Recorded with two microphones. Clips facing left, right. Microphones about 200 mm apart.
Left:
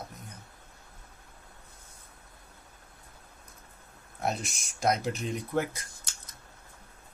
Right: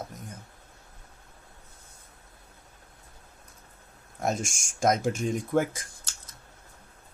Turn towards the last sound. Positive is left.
turn(degrees=-45)  # may be behind; listen again after turning